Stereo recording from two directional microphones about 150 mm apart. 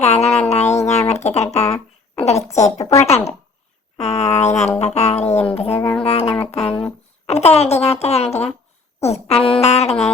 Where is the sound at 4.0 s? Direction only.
45° left (ahead or behind).